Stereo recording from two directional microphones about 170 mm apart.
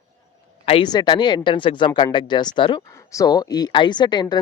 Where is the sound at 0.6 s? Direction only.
30° left (ahead or behind).